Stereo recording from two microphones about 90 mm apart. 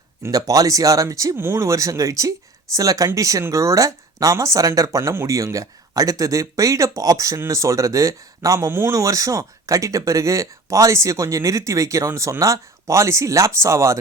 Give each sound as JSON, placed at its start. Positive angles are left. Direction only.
{"t": 0.3, "sound": "speech", "side_deg": -45}